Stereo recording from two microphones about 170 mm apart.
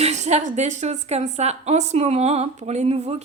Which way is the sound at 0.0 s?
40° right (ahead or behind).